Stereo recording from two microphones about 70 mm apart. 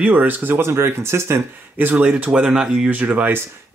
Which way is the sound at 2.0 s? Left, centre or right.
Centre.